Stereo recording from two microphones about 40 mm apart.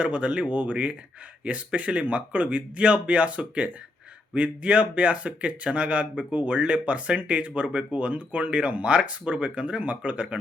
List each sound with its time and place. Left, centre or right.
0.0 s speech: right